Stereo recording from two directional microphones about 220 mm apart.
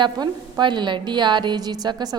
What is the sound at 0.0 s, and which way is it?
A woman's voice, 20° right (ahead or behind).